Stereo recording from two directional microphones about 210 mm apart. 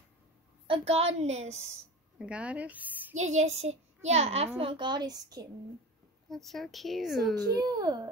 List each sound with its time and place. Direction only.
0.7 s a child's voice: 30° right (ahead or behind)
2.1 s a woman's voice: 5° right (ahead or behind)
3.3 s a child's voice: 30° right (ahead or behind)
6.2 s a woman's voice: centre (ahead or behind)
7.5 s a child's voice: 20° right (ahead or behind)